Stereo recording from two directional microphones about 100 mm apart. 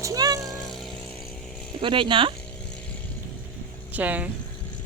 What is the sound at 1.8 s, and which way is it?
Speech, 55° right (ahead or behind).